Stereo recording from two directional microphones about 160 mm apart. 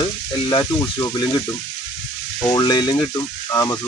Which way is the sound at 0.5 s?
20° left (ahead or behind).